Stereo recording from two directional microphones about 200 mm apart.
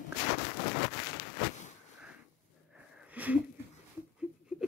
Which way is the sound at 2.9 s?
5° right (ahead or behind).